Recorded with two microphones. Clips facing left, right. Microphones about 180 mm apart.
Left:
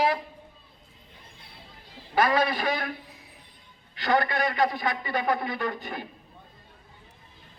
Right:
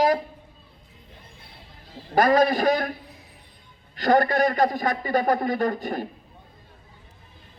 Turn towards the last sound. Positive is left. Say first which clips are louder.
# right 7 dB
turn(degrees=-40)  # may be behind; listen again after turning